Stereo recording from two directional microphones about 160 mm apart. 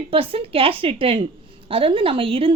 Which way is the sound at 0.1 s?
35° right (ahead or behind).